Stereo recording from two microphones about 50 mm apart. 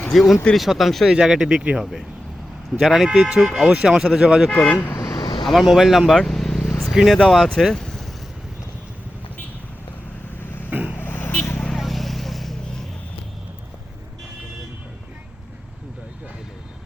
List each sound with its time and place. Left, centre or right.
0.1 s speech: centre
1.1 s speech: centre
2.9 s speech: centre
4.5 s speech: left
5.5 s vehicle: centre
6.9 s speech: centre
7.7 s vehicle: centre
10.7 s vehicle: right
10.9 s vehicle: left
11.8 s vehicle: centre